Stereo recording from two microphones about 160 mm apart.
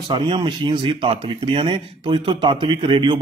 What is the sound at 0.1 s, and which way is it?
Speech, 30° right (ahead or behind).